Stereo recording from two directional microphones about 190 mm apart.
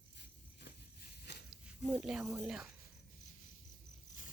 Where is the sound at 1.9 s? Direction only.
5° right (ahead or behind).